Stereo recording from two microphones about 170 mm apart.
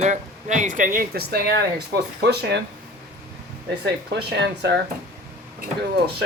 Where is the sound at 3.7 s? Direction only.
80° right.